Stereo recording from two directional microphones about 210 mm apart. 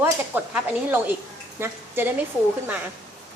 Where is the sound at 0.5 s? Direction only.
10° right (ahead or behind).